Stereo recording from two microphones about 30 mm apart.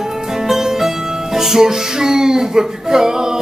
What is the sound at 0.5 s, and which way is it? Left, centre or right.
Music, centre.